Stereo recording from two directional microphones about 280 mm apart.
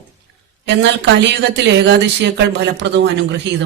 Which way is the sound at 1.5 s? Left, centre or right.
Right.